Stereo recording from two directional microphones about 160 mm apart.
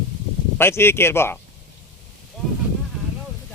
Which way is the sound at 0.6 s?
15° left (ahead or behind).